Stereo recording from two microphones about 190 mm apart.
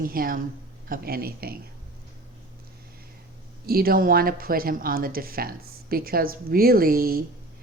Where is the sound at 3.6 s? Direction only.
50° right (ahead or behind).